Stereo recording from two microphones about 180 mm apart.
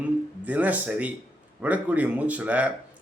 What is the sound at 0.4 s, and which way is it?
A man's voice, 10° right (ahead or behind).